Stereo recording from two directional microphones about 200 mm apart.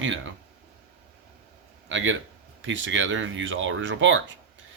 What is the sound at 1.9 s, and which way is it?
A man's voice, 70° right (ahead or behind).